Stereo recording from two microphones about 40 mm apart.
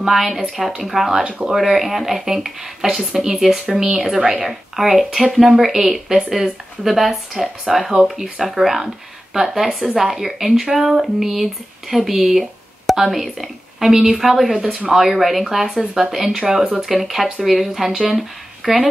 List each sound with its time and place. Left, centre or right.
0.0 s a woman's voice: centre
1.6 s a woman's voice: centre
5.4 s a woman's voice: centre